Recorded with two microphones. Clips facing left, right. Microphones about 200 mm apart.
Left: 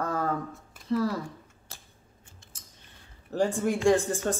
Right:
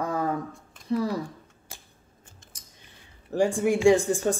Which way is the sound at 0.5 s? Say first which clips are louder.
Even; 5° left (ahead or behind).